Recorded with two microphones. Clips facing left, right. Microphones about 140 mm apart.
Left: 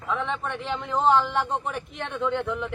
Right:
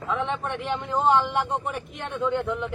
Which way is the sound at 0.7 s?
5° right (ahead or behind).